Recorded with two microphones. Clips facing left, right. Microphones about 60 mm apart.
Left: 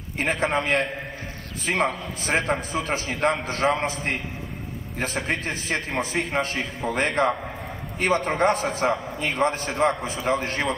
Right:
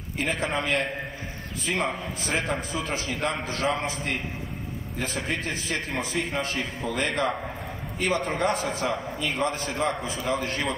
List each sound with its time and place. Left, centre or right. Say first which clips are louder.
0.2 s a man's voice: left 4 dB; left
2.9 s a man's voice: left 6 dB; left